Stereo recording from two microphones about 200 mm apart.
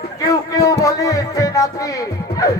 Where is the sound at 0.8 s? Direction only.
15° left (ahead or behind).